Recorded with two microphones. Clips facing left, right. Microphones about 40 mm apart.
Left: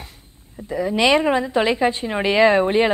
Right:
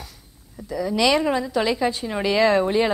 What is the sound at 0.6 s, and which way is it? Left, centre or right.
A woman's voice, left.